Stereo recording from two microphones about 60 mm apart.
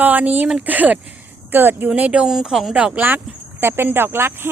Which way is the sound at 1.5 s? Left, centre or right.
Right.